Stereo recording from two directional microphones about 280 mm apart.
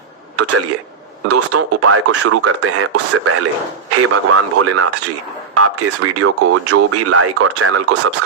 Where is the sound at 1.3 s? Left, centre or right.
Right.